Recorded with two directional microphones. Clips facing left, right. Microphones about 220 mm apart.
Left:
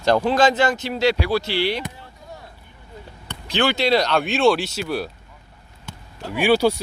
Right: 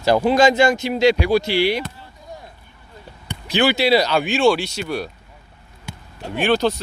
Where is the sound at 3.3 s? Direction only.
10° right (ahead or behind).